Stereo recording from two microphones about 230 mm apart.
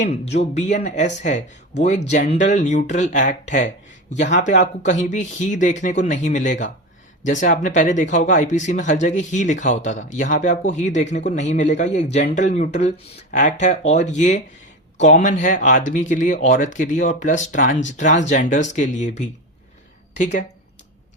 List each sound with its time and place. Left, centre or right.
0.0 s speech: left